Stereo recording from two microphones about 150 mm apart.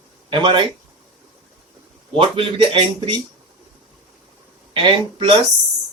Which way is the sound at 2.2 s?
35° right (ahead or behind).